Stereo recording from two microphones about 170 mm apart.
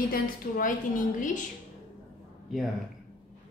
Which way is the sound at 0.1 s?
55° left (ahead or behind).